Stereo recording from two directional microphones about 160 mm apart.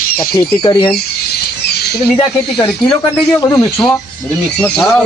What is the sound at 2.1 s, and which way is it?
Speech, 30° left (ahead or behind).